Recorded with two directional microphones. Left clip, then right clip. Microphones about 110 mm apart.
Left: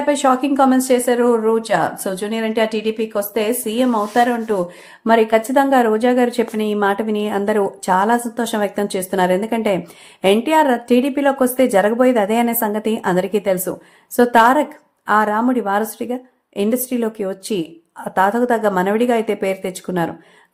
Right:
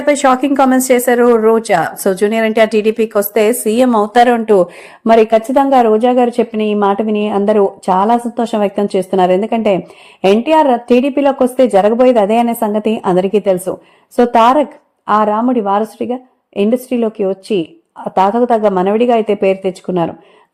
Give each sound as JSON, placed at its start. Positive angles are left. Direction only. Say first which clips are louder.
{"t": 0.0, "sound": "speech", "louder": "right 5 dB", "side_deg": -60}
{"t": 5.0, "sound": "a woman's voice", "louder": "right 5 dB", "side_deg": -60}
{"t": 5.5, "sound": "a woman's voice", "louder": "right 5 dB", "side_deg": -35}
{"t": 14.2, "sound": "a woman's voice", "louder": "right 3 dB", "side_deg": -30}